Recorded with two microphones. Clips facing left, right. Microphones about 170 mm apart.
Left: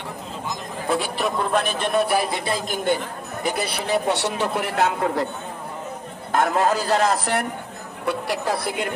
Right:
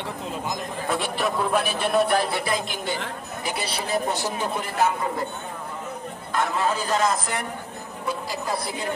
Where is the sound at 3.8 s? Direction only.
75° left (ahead or behind).